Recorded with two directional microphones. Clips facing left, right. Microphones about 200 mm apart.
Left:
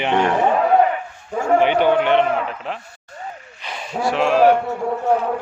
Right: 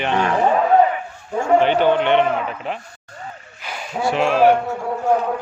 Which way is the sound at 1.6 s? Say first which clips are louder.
Even; 10° left (ahead or behind).